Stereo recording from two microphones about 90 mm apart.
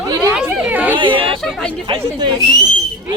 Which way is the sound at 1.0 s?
70° right (ahead or behind).